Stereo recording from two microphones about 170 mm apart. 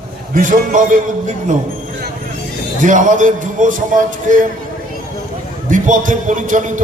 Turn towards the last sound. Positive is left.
turn(degrees=-50)  # may be behind; listen again after turning